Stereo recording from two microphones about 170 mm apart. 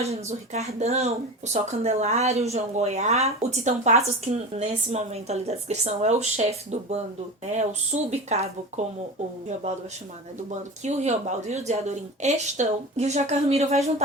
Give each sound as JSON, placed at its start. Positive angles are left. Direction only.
{"t": 0.0, "sound": "speech", "side_deg": -40}
{"t": 10.5, "sound": "speech", "side_deg": -40}